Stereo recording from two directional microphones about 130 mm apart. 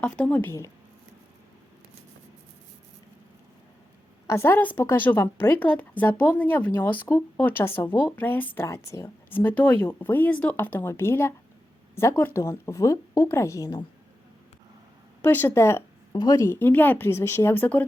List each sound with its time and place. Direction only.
0.0 s a woman's voice: 10° left (ahead or behind)
4.3 s a woman's voice: 20° left (ahead or behind)
15.2 s a woman's voice: 15° left (ahead or behind)